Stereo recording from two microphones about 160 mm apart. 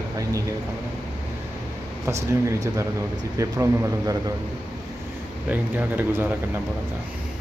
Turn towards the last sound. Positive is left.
turn(degrees=-10)  # may be behind; listen again after turning